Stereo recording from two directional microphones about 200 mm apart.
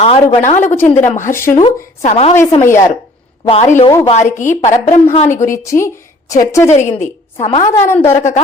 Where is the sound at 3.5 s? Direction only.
35° left (ahead or behind).